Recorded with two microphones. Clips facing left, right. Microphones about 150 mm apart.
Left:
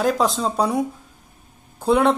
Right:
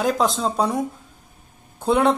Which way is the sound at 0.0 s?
Centre (ahead or behind).